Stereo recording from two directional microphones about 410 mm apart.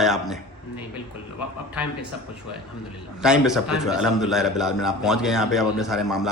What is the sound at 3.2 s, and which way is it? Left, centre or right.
A man's voice, centre.